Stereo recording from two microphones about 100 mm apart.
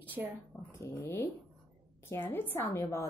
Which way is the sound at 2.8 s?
30° left (ahead or behind).